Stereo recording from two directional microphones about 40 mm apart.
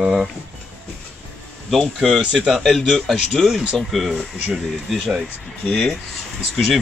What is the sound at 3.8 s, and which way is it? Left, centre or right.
Speech, centre.